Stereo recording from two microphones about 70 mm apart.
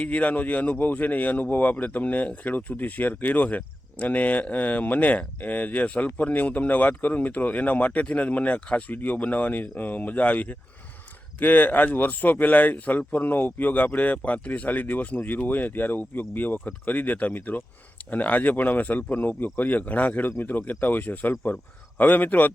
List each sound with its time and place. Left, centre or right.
0.0 s speech: left